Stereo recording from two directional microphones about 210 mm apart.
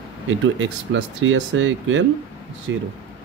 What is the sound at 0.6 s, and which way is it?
Speech, 65° right (ahead or behind).